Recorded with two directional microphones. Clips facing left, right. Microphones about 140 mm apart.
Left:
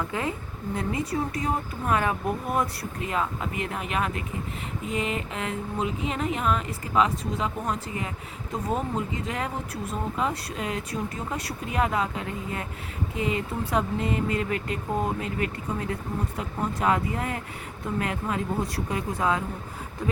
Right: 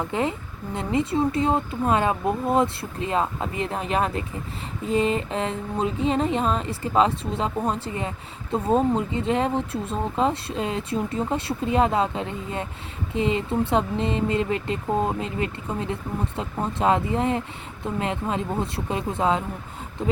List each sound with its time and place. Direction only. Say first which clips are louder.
0.0 s speech: right 4 dB; 25° right (ahead or behind)
4.9 s a sound: right 7 dB; 30° right (ahead or behind)
8.5 s speech: right 7 dB; 30° right (ahead or behind)